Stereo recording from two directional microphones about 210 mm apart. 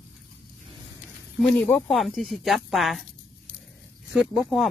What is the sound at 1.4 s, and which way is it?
Speech, 5° left (ahead or behind).